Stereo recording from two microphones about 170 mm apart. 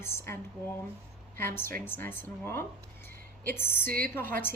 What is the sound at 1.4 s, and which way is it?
A woman's voice, 15° left (ahead or behind).